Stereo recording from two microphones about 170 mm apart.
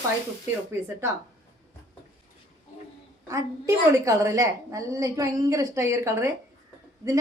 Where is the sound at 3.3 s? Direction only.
20° right (ahead or behind).